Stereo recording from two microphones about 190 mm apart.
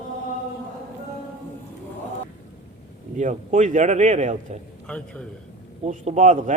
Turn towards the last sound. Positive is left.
turn(degrees=-40)  # may be behind; listen again after turning